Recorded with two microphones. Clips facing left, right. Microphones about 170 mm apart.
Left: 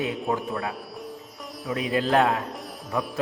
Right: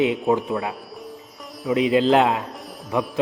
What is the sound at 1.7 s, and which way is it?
Speech, 20° right (ahead or behind).